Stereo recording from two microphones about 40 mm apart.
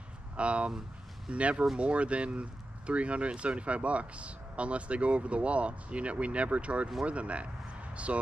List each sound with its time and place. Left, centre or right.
0.4 s speech: right